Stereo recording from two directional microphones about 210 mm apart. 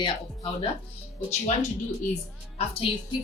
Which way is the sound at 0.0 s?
25° left (ahead or behind).